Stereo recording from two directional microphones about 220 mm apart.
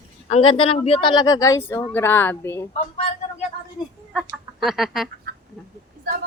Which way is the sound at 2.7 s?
30° left (ahead or behind).